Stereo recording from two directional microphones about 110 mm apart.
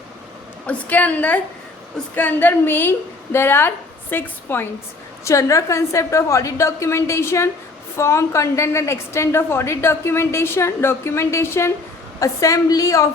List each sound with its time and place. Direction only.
0.7 s a woman's voice: 15° left (ahead or behind); by 13.1 s 30° left (ahead or behind)